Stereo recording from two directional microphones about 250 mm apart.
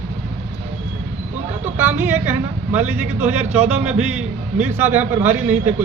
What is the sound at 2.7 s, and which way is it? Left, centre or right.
A man's voice, centre.